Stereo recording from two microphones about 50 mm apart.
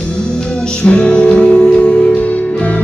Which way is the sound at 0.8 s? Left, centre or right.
Left.